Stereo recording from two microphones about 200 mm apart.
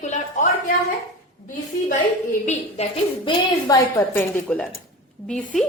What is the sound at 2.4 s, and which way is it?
Speech, 35° left (ahead or behind).